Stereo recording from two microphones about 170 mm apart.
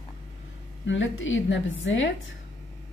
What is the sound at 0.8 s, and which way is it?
A woman's voice, 90° left.